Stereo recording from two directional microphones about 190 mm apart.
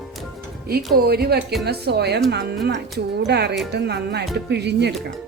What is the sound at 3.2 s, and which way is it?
A woman's voice, 60° right (ahead or behind).